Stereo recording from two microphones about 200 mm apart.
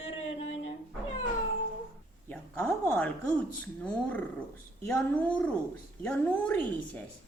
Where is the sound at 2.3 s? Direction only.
10° left (ahead or behind).